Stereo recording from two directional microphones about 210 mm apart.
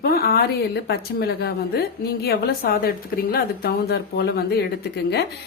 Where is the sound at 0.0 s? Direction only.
45° left (ahead or behind).